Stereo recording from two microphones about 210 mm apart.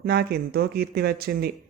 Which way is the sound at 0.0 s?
50° right (ahead or behind).